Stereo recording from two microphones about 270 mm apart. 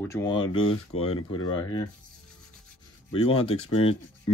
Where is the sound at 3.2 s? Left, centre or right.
Left.